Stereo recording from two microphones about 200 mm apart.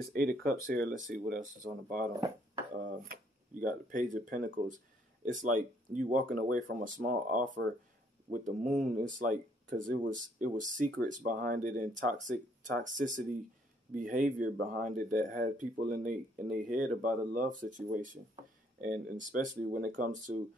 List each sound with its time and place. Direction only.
0.1 s speech: 50° right (ahead or behind)
2.1 s speech: 15° right (ahead or behind)
2.8 s speech: 45° right (ahead or behind)
13.9 s speech: 40° right (ahead or behind)